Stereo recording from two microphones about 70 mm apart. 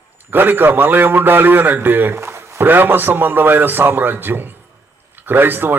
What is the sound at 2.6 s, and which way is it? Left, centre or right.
A man's voice, right.